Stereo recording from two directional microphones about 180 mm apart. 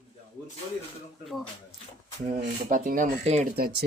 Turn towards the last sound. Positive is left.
turn(degrees=-60)  # may be behind; listen again after turning